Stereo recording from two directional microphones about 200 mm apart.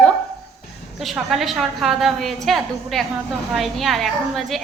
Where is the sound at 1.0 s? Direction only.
Centre (ahead or behind).